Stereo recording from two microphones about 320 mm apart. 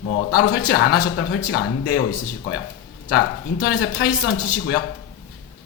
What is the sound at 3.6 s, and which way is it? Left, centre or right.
Speech, left.